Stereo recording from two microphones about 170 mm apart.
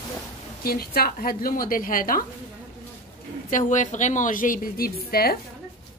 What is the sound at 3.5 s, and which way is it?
A woman's voice, 45° left (ahead or behind).